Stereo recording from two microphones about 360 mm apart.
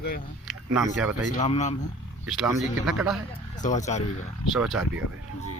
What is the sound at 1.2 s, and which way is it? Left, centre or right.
Speech, centre.